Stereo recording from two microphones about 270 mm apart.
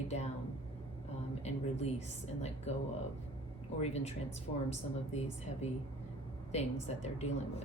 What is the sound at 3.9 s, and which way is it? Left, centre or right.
A woman's voice, left.